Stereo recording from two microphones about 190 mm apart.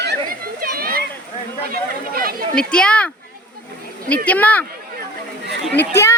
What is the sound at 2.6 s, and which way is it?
Speech, 5° left (ahead or behind).